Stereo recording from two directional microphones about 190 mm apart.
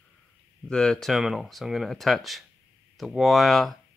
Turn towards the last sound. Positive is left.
turn(degrees=0)  # may be behind; listen again after turning